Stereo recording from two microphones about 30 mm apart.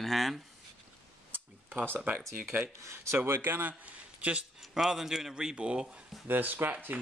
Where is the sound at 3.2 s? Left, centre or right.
Right.